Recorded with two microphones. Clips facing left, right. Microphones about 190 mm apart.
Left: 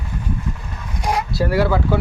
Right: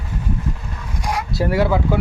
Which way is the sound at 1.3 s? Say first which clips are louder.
Right 1 dB; 20° right (ahead or behind).